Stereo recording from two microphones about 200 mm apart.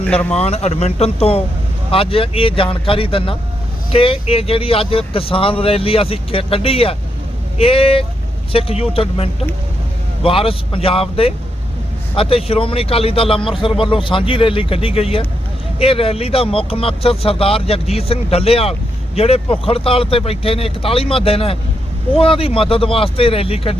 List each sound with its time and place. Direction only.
0.0 s speech: 5° left (ahead or behind)
0.3 s speech: 30° left (ahead or behind)